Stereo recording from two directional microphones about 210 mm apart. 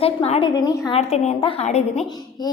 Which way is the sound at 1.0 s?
30° left (ahead or behind).